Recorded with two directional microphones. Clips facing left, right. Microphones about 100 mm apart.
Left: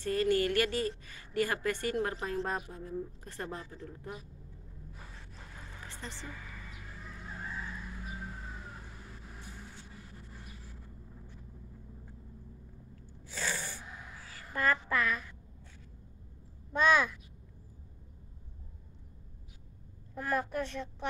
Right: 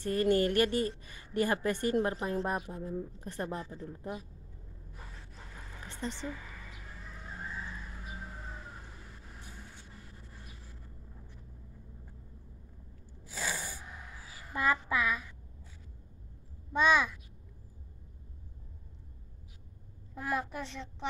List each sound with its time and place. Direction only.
0.0 s a woman's voice: 20° right (ahead or behind)
5.9 s a sound: 20° right (ahead or behind)
13.3 s sneeze: 10° right (ahead or behind)
14.2 s a woman's voice: 15° right (ahead or behind)
16.7 s a child's voice: centre (ahead or behind)
20.2 s a woman's voice: 5° right (ahead or behind)